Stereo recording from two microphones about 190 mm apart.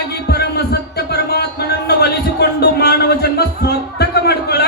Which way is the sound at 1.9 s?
55° left (ahead or behind).